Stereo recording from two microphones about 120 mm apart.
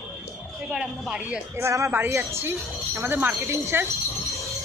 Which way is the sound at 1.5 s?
25° right (ahead or behind).